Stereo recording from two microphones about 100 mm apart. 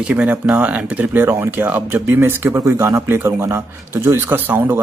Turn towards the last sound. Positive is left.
turn(degrees=-20)  # may be behind; listen again after turning